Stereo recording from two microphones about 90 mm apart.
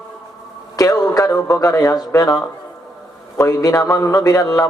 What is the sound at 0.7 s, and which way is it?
Speech, 40° left (ahead or behind).